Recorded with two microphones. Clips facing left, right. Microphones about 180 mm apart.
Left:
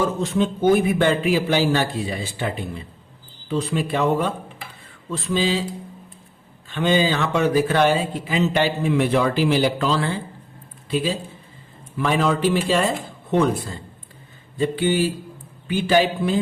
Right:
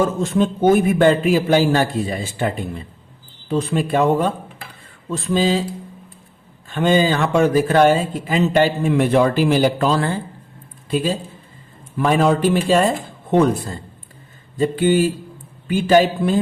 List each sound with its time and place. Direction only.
0.0 s speech: 45° right (ahead or behind)
3.5 s speech: 50° right (ahead or behind)
6.7 s speech: 45° right (ahead or behind)
14.6 s speech: 45° right (ahead or behind)